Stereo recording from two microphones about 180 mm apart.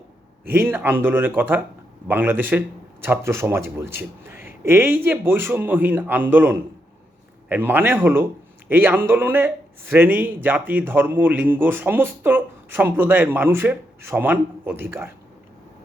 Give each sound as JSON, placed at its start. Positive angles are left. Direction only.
{"t": 0.4, "sound": "speech", "side_deg": -10}